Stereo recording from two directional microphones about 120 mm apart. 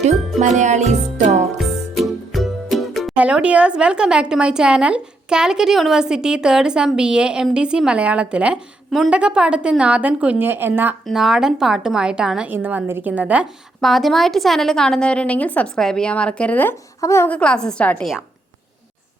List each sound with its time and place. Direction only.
0.3 s music: 75° right (ahead or behind)
1.5 s music: centre (ahead or behind)
3.2 s speech: 10° right (ahead or behind)
11.0 s a woman's voice: centre (ahead or behind)
13.8 s a woman's voice: centre (ahead or behind)
17.0 s a woman's voice: 25° left (ahead or behind)
17.2 s a woman's voice: 10° left (ahead or behind)